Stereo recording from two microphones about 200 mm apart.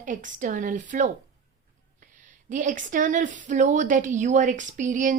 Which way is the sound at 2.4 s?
40° right (ahead or behind).